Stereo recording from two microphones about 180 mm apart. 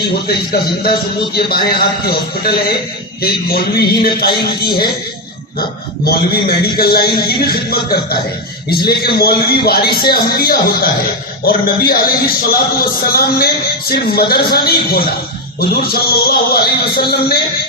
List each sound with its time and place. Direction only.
0.5 s a man's voice: 60° left (ahead or behind)
6.1 s a man's voice: 60° left (ahead or behind)